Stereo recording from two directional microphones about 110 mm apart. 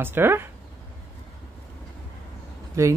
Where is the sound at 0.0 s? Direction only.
20° right (ahead or behind).